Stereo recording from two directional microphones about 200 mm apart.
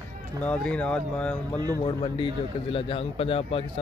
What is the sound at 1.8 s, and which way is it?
A man's voice, 25° left (ahead or behind).